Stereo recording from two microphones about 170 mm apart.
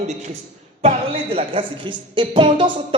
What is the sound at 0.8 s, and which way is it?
A man's voice, 35° right (ahead or behind).